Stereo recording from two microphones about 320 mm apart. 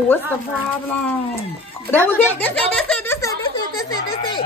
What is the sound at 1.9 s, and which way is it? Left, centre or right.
Speech, centre.